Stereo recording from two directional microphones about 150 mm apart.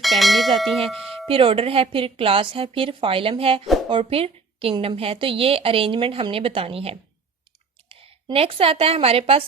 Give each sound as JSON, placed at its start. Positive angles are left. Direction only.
{"t": 0.0, "sound": "speech", "side_deg": 0}
{"t": 1.3, "sound": "a woman's voice", "side_deg": -35}